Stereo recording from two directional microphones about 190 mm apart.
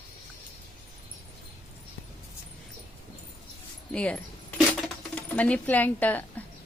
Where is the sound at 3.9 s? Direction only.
5° left (ahead or behind).